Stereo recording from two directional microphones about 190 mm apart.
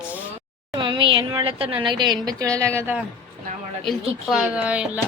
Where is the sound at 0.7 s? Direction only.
25° right (ahead or behind); by 4.8 s 5° right (ahead or behind).